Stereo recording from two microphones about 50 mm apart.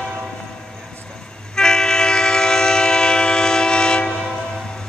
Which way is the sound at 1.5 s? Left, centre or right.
Centre.